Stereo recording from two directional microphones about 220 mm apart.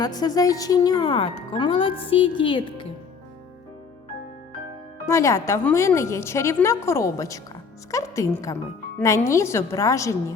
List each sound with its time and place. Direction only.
0.2 s speech: 15° left (ahead or behind)
5.0 s a woman's voice: 15° left (ahead or behind)